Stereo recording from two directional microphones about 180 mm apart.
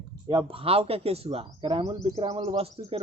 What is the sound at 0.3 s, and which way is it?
Speech, 30° right (ahead or behind).